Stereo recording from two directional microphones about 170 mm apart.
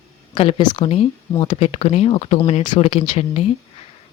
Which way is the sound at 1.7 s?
40° left (ahead or behind).